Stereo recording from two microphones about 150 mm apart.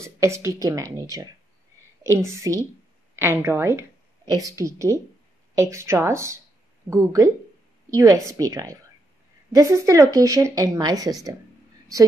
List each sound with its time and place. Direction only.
0.0 s speech: 20° right (ahead or behind)